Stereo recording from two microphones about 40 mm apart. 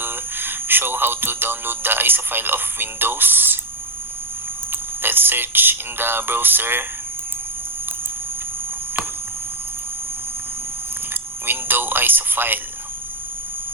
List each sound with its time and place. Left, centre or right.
0.0 s speech: right
5.0 s speech: right
11.4 s radio: right